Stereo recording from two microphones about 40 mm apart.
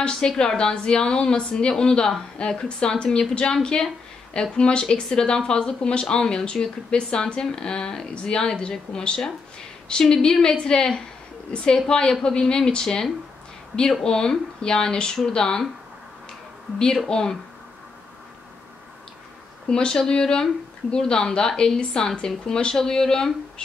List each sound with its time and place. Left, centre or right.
0.4 s speech: centre
16.7 s speech: centre
19.7 s speech: centre